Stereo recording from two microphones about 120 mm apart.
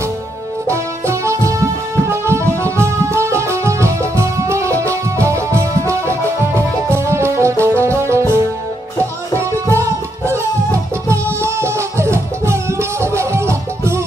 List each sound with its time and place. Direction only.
0.7 s music: 25° right (ahead or behind)